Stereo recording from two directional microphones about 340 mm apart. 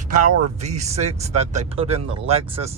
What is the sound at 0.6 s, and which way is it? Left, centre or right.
Speech, centre.